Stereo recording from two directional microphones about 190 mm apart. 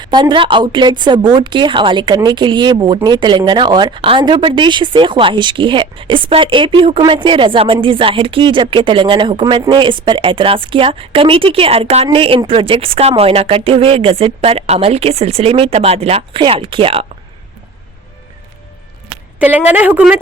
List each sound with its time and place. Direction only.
0.0 s a woman's voice: 25° right (ahead or behind)
19.4 s a woman's voice: 10° right (ahead or behind)